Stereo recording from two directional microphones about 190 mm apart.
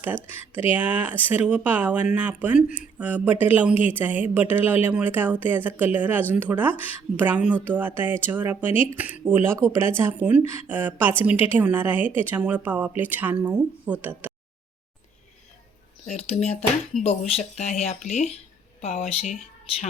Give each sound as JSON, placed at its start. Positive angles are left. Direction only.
{"t": 0.5, "sound": "speech", "side_deg": -10}
{"t": 16.0, "sound": "speech", "side_deg": 35}